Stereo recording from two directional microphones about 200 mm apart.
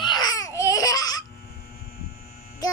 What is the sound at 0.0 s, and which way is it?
Laughter, 20° left (ahead or behind).